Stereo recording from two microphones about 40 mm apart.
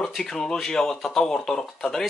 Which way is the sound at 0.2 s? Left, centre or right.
Centre.